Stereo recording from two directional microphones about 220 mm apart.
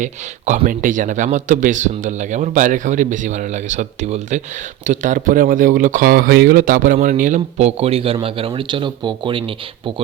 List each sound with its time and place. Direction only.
0.0 s speech: 35° right (ahead or behind)